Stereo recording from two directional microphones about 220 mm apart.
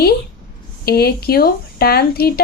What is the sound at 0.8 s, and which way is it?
Speech, 45° left (ahead or behind).